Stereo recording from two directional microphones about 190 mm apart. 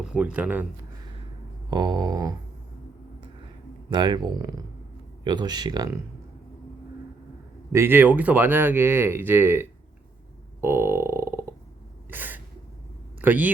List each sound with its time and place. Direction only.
0.0 s speech: 5° right (ahead or behind)
1.7 s speech: 20° right (ahead or behind)
3.8 s speech: 25° right (ahead or behind)
7.7 s speech: 15° right (ahead or behind)
10.6 s burping: 10° right (ahead or behind)
12.1 s gasp: 10° right (ahead or behind)
13.2 s speech: 10° right (ahead or behind)